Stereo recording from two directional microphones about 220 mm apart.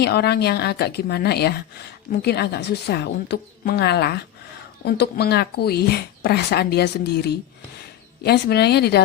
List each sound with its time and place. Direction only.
0.0 s speech: 45° left (ahead or behind)